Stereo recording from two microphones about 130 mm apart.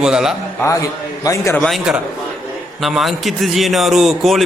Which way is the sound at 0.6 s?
25° left (ahead or behind).